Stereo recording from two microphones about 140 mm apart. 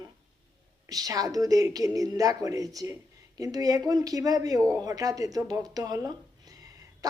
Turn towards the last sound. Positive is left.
turn(degrees=-25)  # may be behind; listen again after turning